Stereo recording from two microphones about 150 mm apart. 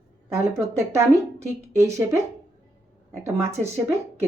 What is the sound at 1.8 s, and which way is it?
Speech, 20° right (ahead or behind).